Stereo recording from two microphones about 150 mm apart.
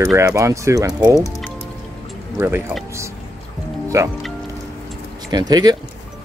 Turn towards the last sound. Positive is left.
turn(degrees=-25)  # may be behind; listen again after turning